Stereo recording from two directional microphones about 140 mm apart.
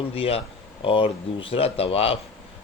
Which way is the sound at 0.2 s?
45° left (ahead or behind).